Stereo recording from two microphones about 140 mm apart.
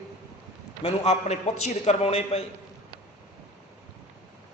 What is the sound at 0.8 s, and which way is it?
A man's voice, 50° left (ahead or behind).